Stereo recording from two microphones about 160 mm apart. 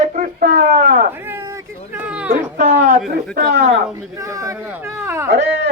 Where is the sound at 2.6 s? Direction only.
45° right (ahead or behind).